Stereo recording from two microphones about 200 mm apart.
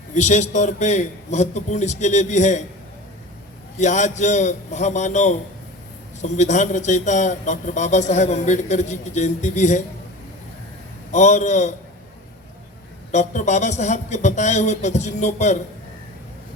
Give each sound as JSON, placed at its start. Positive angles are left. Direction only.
{"t": 0.1, "sound": "a man's voice", "side_deg": 35}
{"t": 3.8, "sound": "a man's voice", "side_deg": 35}
{"t": 11.1, "sound": "a man's voice", "side_deg": 35}
{"t": 13.1, "sound": "a man's voice", "side_deg": 35}